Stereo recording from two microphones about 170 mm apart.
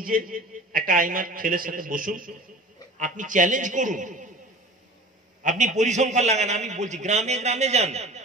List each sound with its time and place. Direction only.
0.0 s a man's voice: 55° right (ahead or behind)
5.4 s a man's voice: 45° right (ahead or behind)